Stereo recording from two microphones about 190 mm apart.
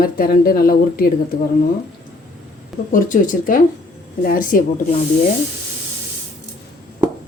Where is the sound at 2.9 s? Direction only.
45° left (ahead or behind).